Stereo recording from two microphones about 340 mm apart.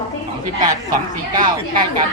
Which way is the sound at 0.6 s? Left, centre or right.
Centre.